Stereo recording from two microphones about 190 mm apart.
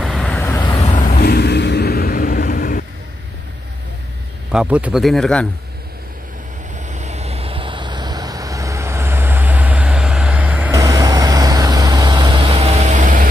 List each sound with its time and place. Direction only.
0.0 s vehicle: centre (ahead or behind)
0.9 s vehicle: 50° left (ahead or behind)
4.5 s a man's voice: 5° right (ahead or behind)
6.9 s vehicle: 35° right (ahead or behind); by 10.7 s 5° right (ahead or behind)
10.7 s vehicle: 20° right (ahead or behind); by 13.3 s 45° right (ahead or behind)